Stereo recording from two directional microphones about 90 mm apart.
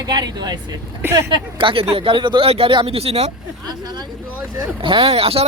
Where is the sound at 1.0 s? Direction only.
25° right (ahead or behind).